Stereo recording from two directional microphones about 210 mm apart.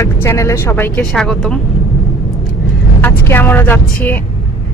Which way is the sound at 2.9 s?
10° left (ahead or behind).